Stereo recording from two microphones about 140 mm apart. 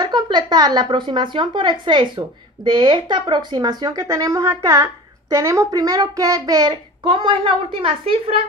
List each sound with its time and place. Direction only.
0.0 s a woman's voice: 30° right (ahead or behind)
6.7 s a woman's voice: 35° right (ahead or behind)